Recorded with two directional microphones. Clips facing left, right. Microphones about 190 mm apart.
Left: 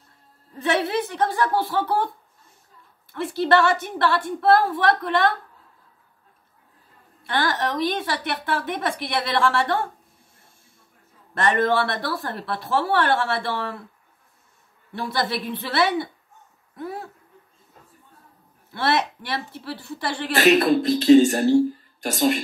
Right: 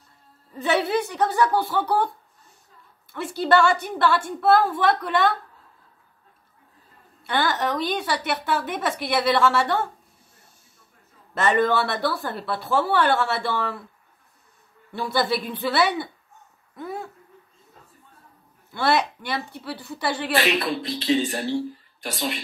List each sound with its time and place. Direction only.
0.6 s a woman's voice: centre (ahead or behind)
3.1 s a woman's voice: centre (ahead or behind)
7.2 s a woman's voice: centre (ahead or behind)
11.3 s a woman's voice: centre (ahead or behind)
14.9 s a woman's voice: centre (ahead or behind)
16.7 s dog: centre (ahead or behind)
18.7 s a woman's voice: centre (ahead or behind)
20.3 s speech: 45° left (ahead or behind)